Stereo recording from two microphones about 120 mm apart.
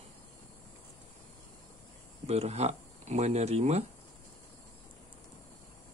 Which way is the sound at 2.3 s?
65° right (ahead or behind).